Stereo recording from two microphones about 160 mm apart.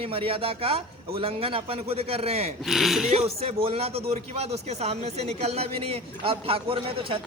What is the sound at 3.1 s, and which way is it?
Speech, 40° right (ahead or behind).